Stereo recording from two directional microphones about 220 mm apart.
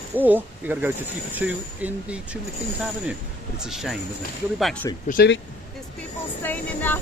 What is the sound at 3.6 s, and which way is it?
Speech, centre (ahead or behind).